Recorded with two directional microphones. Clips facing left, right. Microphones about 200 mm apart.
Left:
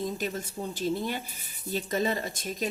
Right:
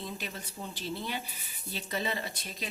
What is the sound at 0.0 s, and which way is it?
Speech, 45° left (ahead or behind).